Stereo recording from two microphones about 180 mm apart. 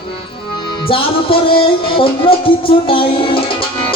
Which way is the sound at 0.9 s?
30° left (ahead or behind).